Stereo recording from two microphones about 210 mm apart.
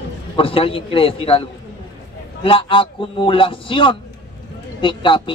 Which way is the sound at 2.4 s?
25° left (ahead or behind).